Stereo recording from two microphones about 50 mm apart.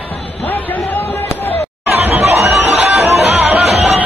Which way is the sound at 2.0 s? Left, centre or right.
Right.